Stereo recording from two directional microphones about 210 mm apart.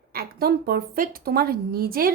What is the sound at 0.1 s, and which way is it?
A woman's voice, 50° right (ahead or behind).